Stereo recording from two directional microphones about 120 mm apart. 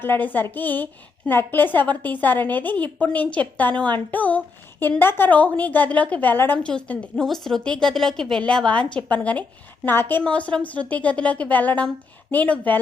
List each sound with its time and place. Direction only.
0.0 s a woman's voice: 15° left (ahead or behind)